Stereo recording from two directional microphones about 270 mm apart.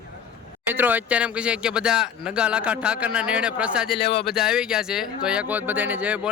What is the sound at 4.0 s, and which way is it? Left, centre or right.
Speech, left.